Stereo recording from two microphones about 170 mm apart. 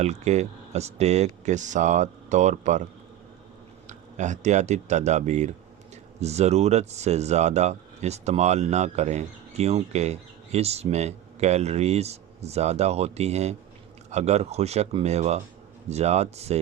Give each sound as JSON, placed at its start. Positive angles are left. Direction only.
{"t": 0.0, "sound": "speech", "side_deg": -40}
{"t": 3.8, "sound": "speech", "side_deg": -45}